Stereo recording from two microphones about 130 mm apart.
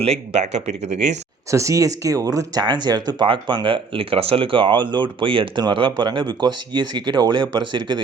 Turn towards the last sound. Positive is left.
turn(degrees=-35)  # may be behind; listen again after turning